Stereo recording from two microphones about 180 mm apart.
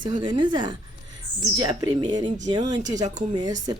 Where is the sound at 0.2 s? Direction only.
25° right (ahead or behind).